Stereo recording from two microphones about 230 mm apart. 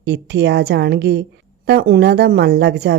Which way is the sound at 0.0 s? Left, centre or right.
Right.